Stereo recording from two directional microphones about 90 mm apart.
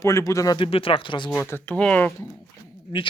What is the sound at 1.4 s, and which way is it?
Speech, 20° left (ahead or behind).